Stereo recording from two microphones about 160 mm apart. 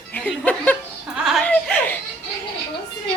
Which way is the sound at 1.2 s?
5° right (ahead or behind).